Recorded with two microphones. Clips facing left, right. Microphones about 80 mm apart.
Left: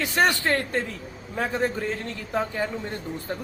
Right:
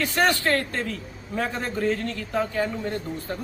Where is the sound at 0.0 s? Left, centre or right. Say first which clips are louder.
Even; left.